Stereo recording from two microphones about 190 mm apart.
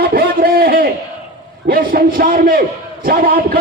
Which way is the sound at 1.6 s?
50° right (ahead or behind).